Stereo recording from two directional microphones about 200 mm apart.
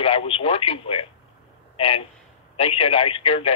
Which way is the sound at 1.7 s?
30° left (ahead or behind).